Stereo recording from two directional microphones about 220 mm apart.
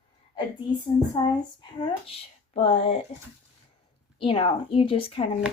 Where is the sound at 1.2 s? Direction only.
20° left (ahead or behind).